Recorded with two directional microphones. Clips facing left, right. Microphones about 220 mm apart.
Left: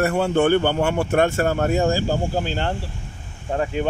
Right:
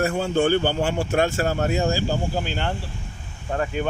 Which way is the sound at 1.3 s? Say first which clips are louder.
Left 3 dB; 50° left (ahead or behind).